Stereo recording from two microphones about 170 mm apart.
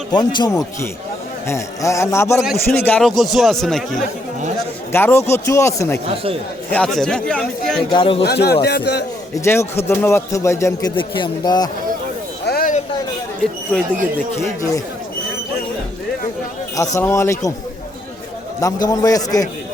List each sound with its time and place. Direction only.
0.3 s a man's voice: 20° left (ahead or behind)
3.0 s speech: centre (ahead or behind)
4.9 s speech: 15° left (ahead or behind)
6.7 s speech: 5° left (ahead or behind)
7.9 s a man's voice: 30° left (ahead or behind)
8.2 s speech: 75° left (ahead or behind)
9.3 s speech: 15° left (ahead or behind)
12.5 s a sound: 60° left (ahead or behind)
13.7 s speech: 5° left (ahead or behind)
14.3 s speech: 15° left (ahead or behind)
16.7 s speech: 20° left (ahead or behind)
18.6 s a man's voice: 20° left (ahead or behind)